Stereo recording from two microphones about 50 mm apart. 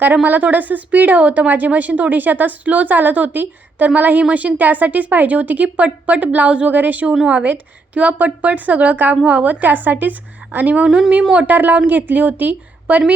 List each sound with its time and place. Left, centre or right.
0.0 s a woman's voice: right